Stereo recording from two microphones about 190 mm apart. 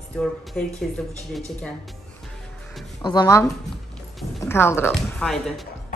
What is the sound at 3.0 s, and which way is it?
Speech, 20° left (ahead or behind).